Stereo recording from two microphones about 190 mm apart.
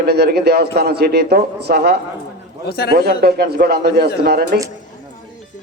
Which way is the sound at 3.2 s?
55° right (ahead or behind).